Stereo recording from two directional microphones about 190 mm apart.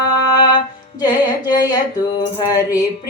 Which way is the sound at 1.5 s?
20° left (ahead or behind).